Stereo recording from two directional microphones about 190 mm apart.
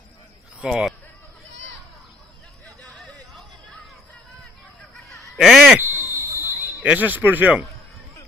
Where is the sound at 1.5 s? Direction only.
70° right (ahead or behind).